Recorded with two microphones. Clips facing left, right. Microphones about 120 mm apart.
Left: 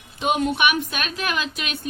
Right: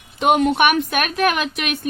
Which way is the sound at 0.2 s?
70° right (ahead or behind).